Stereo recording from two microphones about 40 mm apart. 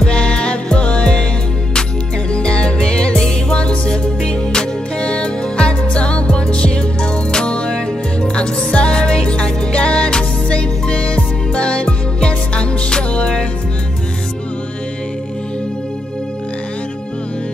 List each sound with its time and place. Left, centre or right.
0.0 s music: left
2.3 s music: left